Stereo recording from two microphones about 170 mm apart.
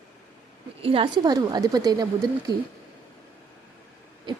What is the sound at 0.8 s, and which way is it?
Speech, 35° right (ahead or behind).